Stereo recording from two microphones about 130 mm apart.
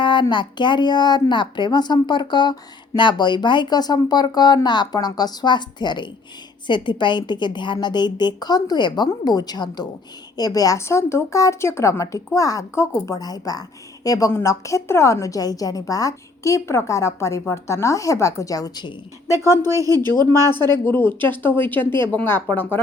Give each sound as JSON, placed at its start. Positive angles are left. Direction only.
{"t": 0.0, "sound": "speech", "side_deg": 35}
{"t": 19.6, "sound": "speech", "side_deg": -25}
{"t": 20.5, "sound": "speech", "side_deg": 15}